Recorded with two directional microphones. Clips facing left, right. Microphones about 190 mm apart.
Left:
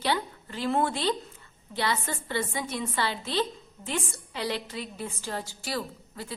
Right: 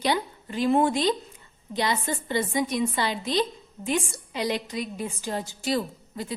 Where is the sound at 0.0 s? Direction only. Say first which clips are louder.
Right 3 dB; 15° right (ahead or behind).